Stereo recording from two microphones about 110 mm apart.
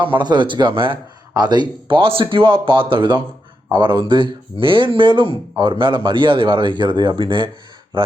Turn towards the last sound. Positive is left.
turn(degrees=-50)  # may be behind; listen again after turning